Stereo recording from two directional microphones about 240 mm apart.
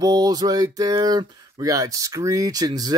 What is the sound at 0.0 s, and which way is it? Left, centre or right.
Speech, centre.